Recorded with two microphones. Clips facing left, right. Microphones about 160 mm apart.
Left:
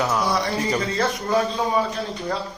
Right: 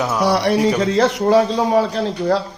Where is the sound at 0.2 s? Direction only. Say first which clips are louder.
Right 7 dB; 75° right (ahead or behind).